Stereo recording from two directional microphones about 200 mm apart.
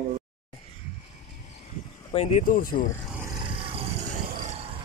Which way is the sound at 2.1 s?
30° left (ahead or behind).